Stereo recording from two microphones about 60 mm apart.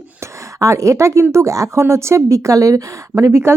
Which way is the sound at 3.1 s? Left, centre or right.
Right.